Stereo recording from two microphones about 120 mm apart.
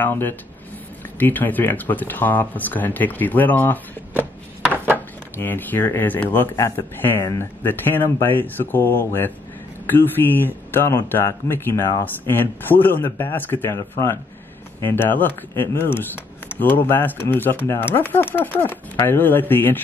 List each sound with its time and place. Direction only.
0.0 s speech: 15° left (ahead or behind)
4.9 s speech: 15° left (ahead or behind)